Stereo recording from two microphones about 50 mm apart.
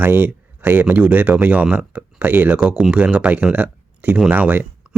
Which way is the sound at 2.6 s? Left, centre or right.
Centre.